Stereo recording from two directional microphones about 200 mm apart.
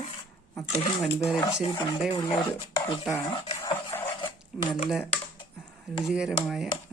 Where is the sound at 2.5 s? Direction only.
20° left (ahead or behind).